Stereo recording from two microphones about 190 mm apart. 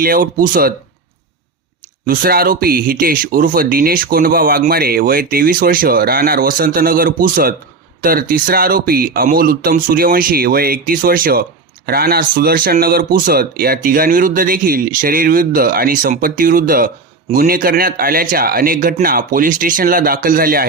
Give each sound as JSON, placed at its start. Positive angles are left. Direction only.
{"t": 0.0, "sound": "speech", "side_deg": -50}
{"t": 2.0, "sound": "speech", "side_deg": -50}